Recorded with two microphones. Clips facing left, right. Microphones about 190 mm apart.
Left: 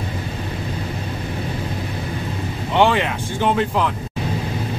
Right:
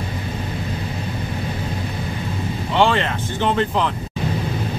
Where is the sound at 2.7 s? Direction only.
15° left (ahead or behind).